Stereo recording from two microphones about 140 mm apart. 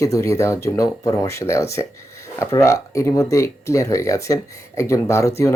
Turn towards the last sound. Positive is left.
turn(degrees=20)  # may be behind; listen again after turning